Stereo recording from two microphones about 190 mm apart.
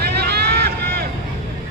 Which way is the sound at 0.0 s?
55° right (ahead or behind).